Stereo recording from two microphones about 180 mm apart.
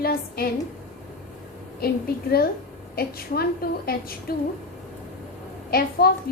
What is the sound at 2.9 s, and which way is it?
A woman's voice, 60° left (ahead or behind).